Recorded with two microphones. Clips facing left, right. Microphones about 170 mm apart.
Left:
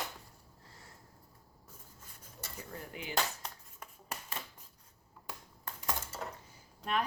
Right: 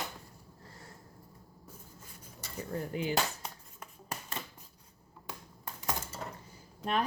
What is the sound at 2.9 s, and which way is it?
Speech, 35° right (ahead or behind).